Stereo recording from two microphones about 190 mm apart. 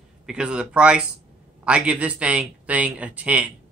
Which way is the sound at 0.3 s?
5° right (ahead or behind).